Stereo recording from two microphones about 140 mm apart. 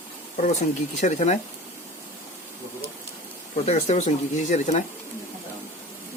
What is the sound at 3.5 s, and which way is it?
Speech, 50° left (ahead or behind).